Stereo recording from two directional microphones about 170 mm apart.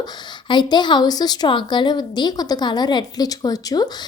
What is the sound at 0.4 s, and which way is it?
Speech, 25° left (ahead or behind).